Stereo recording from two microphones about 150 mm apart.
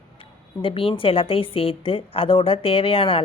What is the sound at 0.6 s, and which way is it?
A woman's voice, 40° left (ahead or behind).